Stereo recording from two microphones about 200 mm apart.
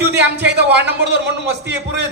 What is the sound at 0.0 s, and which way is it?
A man's voice, 55° right (ahead or behind).